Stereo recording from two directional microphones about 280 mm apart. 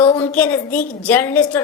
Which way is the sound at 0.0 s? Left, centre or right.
Centre.